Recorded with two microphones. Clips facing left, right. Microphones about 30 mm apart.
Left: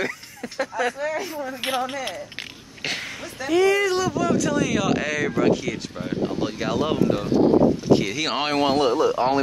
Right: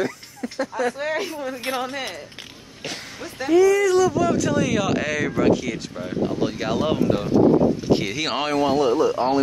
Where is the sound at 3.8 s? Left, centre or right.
Left.